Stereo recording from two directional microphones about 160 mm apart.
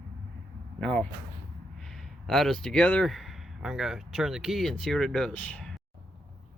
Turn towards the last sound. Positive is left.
turn(degrees=5)  # may be behind; listen again after turning